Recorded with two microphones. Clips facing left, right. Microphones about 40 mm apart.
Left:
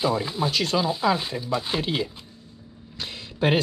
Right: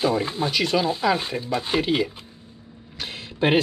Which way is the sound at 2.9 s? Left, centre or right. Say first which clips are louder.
Right 2 dB; right.